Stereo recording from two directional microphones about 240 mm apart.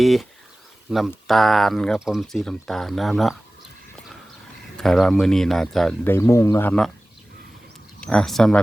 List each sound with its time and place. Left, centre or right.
0.0 s speech: centre
4.8 s speech: centre
8.0 s speech: centre